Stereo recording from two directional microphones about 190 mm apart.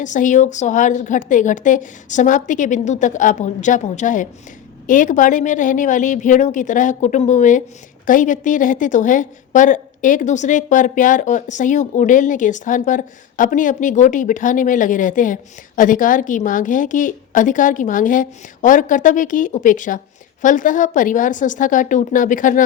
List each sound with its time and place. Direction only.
0.0 s a woman's voice: 40° left (ahead or behind)